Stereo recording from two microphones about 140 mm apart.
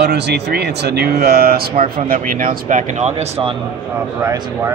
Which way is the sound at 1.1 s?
90° right.